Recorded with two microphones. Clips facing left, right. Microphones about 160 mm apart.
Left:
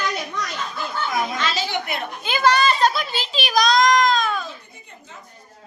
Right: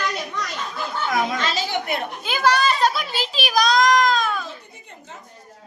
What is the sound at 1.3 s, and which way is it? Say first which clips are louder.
Speech: even; 45° right (ahead or behind).